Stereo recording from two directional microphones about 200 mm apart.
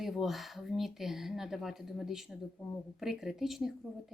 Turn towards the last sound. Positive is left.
turn(degrees=0)  # may be behind; listen again after turning